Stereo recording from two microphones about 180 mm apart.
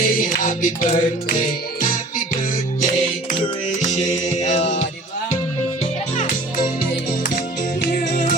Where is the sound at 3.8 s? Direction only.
40° left (ahead or behind).